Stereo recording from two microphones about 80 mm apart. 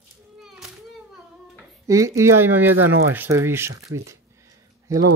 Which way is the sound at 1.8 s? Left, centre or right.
Right.